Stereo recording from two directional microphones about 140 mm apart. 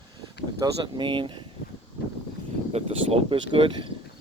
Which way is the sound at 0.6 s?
35° right (ahead or behind).